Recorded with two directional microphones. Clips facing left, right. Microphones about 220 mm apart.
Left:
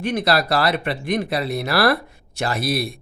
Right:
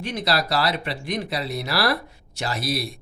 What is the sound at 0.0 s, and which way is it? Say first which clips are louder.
Speech: left 5 dB; 55° left (ahead or behind).